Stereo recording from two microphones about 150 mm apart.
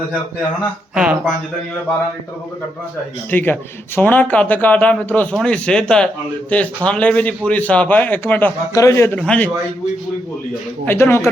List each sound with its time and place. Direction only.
0.9 s speech: 5° right (ahead or behind)
3.2 s speech: 10° left (ahead or behind)
8.7 s speech: 20° left (ahead or behind)
10.8 s speech: 15° left (ahead or behind)